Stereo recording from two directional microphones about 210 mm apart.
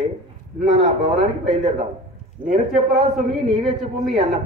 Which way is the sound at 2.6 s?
Centre (ahead or behind).